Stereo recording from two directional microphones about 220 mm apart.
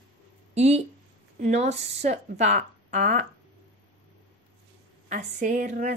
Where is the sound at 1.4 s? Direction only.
30° right (ahead or behind).